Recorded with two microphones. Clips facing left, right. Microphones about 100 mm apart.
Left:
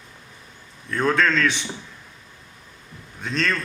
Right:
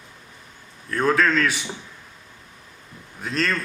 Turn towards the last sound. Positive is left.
turn(degrees=-5)  # may be behind; listen again after turning